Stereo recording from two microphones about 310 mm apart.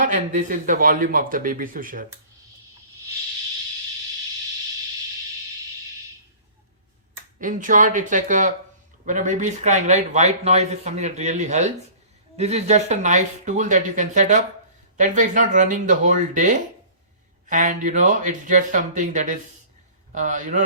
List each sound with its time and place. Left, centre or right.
0.0 s speech: right
7.3 s speech: right